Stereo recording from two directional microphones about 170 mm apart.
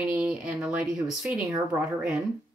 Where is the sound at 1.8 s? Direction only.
5° right (ahead or behind).